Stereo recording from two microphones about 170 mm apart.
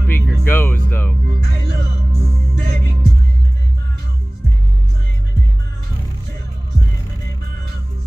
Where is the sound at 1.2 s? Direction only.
60° right (ahead or behind).